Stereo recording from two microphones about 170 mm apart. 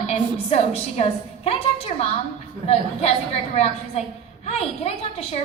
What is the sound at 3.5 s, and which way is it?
A woman's voice, 40° left (ahead or behind).